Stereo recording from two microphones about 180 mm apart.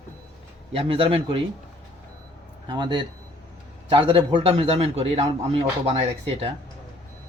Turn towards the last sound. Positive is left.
turn(degrees=-35)  # may be behind; listen again after turning